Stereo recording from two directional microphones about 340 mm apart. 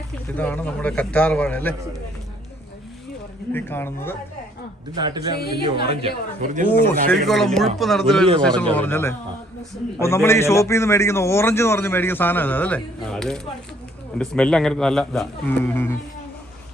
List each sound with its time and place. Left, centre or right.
0.3 s a man's voice: centre
3.5 s a man's voice: centre
4.9 s a man's voice: centre
5.4 s speech: left
6.5 s speech: right
7.1 s a man's voice: centre